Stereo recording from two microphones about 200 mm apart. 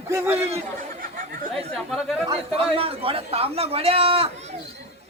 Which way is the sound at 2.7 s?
25° right (ahead or behind).